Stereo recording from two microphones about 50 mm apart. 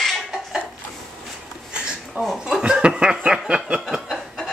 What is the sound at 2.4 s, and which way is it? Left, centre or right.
Chuckle, centre.